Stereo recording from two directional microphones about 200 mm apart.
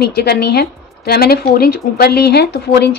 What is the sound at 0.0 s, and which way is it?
Speech, 55° left (ahead or behind).